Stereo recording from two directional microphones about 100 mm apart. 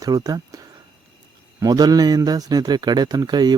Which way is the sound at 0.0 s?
40° right (ahead or behind).